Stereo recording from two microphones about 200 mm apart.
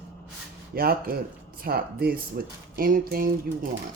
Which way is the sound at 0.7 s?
50° right (ahead or behind).